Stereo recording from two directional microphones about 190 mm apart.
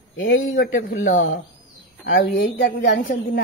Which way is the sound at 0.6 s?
50° left (ahead or behind).